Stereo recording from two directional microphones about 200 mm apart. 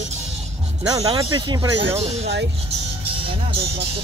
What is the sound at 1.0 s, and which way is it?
Speech, 25° right (ahead or behind).